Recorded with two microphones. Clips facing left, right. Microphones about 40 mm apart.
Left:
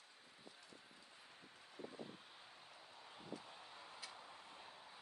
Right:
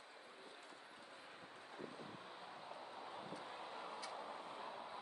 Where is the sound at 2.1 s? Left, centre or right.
Right.